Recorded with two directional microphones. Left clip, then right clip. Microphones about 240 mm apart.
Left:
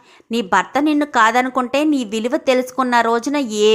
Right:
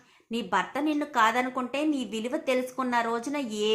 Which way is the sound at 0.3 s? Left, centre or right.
Left.